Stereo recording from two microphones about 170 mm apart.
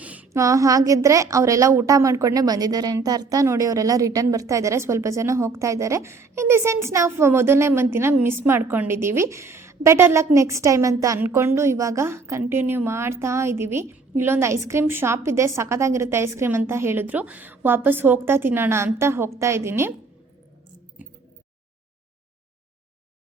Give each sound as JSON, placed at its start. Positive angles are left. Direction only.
{"t": 0.0, "sound": "a woman's voice", "side_deg": -10}